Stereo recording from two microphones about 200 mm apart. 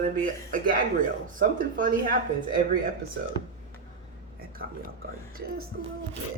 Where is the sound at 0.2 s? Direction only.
40° right (ahead or behind).